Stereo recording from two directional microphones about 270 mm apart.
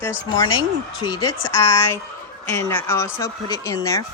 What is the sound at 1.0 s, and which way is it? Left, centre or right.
Speech, centre.